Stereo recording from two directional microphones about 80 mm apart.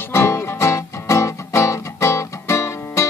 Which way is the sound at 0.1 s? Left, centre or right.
Left.